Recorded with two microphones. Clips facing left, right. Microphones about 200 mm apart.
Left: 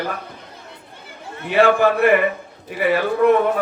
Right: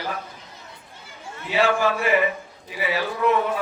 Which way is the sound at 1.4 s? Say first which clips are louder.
Left 6 dB; 55° left (ahead or behind).